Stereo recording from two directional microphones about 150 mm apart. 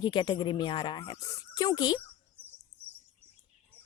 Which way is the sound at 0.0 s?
30° left (ahead or behind).